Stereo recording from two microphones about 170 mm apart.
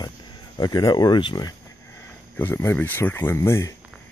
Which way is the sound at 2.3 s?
15° left (ahead or behind).